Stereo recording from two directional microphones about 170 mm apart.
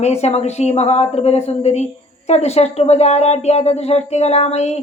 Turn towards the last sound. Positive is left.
turn(degrees=40)  # may be behind; listen again after turning